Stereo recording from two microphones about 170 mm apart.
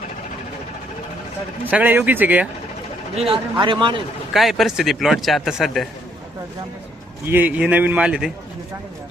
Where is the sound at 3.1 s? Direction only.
30° right (ahead or behind).